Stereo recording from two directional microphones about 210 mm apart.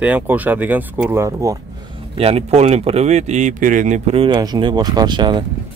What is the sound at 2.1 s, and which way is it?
Speech, 30° right (ahead or behind).